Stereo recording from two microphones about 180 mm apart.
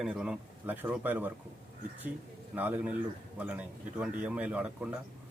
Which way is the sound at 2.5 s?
10° right (ahead or behind).